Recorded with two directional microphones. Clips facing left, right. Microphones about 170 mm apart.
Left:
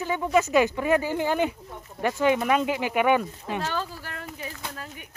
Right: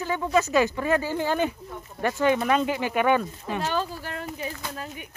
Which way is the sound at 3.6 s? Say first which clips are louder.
Right 4 dB; 20° right (ahead or behind).